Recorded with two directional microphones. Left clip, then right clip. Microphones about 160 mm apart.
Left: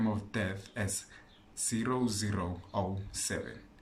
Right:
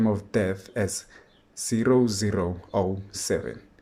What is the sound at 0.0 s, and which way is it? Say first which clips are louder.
Speech: right 10 dB; 40° right (ahead or behind).